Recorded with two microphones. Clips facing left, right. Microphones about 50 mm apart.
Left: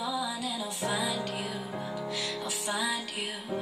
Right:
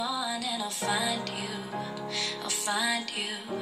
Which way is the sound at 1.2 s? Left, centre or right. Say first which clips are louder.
Left 1 dB; right.